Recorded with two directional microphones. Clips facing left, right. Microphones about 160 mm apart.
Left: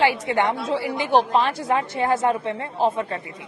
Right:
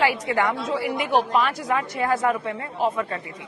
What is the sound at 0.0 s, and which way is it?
A woman's voice, 25° left (ahead or behind).